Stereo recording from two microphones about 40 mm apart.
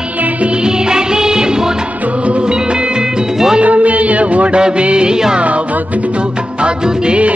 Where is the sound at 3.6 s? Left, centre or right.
Right.